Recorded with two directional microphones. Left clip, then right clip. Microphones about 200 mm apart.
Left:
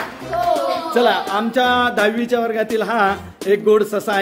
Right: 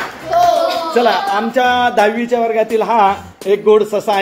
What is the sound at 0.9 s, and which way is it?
Speech, 15° left (ahead or behind).